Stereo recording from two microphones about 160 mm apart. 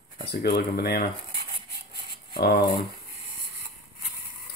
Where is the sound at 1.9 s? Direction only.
75° left (ahead or behind).